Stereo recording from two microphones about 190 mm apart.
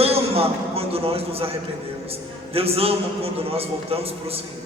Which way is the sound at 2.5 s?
30° right (ahead or behind).